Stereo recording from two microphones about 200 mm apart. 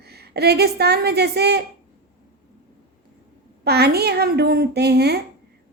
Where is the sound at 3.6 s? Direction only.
55° right (ahead or behind).